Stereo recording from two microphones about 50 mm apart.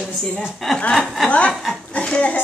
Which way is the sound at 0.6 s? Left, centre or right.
Centre.